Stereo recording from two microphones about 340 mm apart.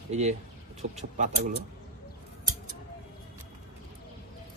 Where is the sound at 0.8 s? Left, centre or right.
Right.